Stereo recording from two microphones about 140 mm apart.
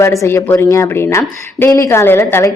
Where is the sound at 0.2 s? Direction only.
20° left (ahead or behind).